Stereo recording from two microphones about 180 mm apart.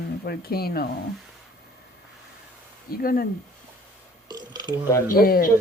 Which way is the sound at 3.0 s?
55° left (ahead or behind).